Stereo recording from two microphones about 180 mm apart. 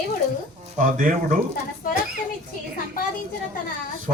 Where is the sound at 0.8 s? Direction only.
50° right (ahead or behind).